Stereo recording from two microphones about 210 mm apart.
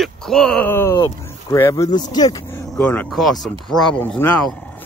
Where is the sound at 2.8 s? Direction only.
5° left (ahead or behind).